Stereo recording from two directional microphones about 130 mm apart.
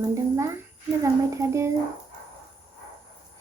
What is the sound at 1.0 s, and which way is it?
Speech, 25° right (ahead or behind).